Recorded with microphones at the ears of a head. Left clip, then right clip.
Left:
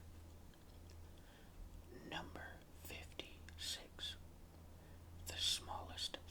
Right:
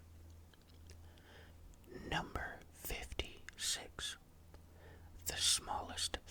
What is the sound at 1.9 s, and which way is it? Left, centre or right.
Whispering, right.